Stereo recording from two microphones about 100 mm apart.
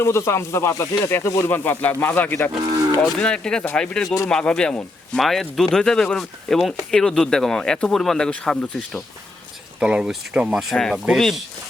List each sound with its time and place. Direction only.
0.0 s speech: 25° left (ahead or behind); by 9.0 s 10° left (ahead or behind)
9.8 s speech: 5° right (ahead or behind)
10.9 s speech: 10° right (ahead or behind)